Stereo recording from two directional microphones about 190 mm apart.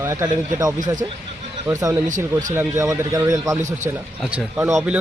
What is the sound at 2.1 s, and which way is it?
Speech, 40° right (ahead or behind).